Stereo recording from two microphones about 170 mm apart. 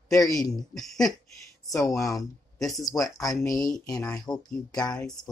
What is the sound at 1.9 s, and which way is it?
Speech, 20° left (ahead or behind).